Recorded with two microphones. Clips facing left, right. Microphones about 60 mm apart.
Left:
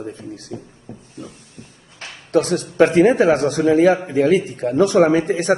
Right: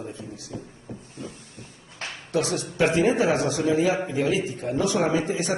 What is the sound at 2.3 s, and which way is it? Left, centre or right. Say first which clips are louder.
A man's voice: left 8 dB; left.